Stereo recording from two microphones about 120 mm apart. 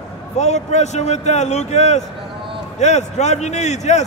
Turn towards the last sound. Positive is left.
turn(degrees=70)  # may be behind; listen again after turning